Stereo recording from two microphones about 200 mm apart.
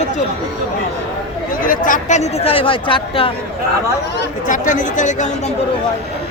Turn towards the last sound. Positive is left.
turn(degrees=40)  # may be behind; listen again after turning